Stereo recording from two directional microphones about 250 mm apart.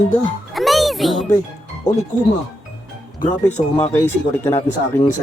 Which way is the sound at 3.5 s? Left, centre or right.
Left.